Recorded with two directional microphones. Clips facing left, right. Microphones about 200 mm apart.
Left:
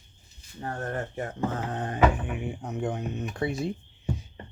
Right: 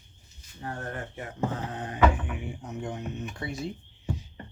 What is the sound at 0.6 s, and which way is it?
Speech, 40° left (ahead or behind).